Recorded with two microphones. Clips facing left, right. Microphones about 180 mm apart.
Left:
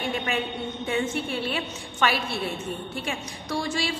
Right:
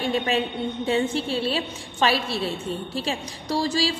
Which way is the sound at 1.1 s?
30° right (ahead or behind).